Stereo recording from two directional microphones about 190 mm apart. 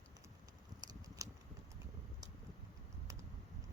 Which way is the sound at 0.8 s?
20° right (ahead or behind).